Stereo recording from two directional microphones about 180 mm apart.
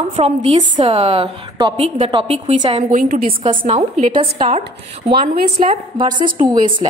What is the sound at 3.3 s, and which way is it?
A woman's voice, 35° right (ahead or behind).